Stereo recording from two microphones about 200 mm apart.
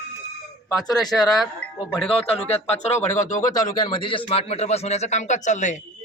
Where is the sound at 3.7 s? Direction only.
20° left (ahead or behind); by 5.8 s 40° left (ahead or behind).